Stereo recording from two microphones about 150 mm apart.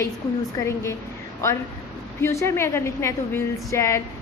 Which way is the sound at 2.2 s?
15° left (ahead or behind).